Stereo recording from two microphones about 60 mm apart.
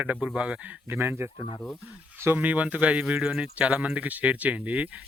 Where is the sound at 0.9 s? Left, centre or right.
Right.